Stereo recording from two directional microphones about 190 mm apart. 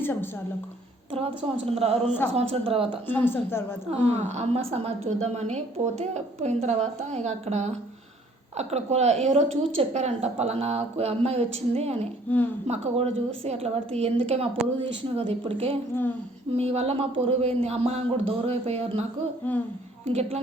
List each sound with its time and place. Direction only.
0.0 s a woman's voice: 10° left (ahead or behind)
1.1 s a woman's voice: 30° right (ahead or behind)
3.1 s speech: 10° left (ahead or behind)
4.1 s a woman's voice: 35° right (ahead or behind)
19.5 s speech: 10° left (ahead or behind)
20.1 s a woman's voice: 35° right (ahead or behind)